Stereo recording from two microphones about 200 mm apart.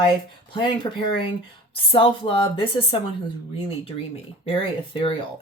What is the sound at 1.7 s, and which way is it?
A woman's voice, 25° left (ahead or behind).